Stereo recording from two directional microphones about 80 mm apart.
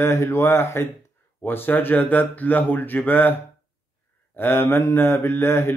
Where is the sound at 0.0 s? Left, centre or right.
Left.